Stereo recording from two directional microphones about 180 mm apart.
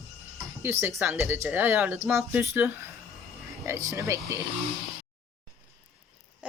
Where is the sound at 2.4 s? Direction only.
15° right (ahead or behind).